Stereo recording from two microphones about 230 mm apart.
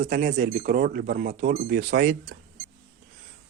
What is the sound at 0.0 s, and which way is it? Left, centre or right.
Speech, right.